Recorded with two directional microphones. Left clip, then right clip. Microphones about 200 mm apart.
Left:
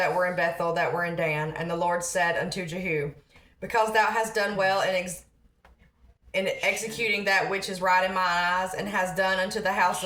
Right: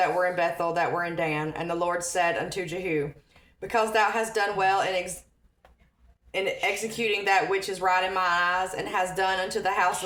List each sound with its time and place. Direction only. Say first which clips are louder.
0.0 s speech: right 1 dB; 30° right (ahead or behind)
6.3 s speech: left 1 dB; 30° right (ahead or behind)